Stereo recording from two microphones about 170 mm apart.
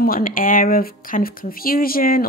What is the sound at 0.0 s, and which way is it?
A woman's voice, 55° left (ahead or behind).